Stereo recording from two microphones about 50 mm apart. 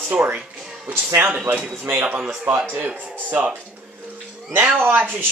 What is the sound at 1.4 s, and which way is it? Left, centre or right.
Speech, right.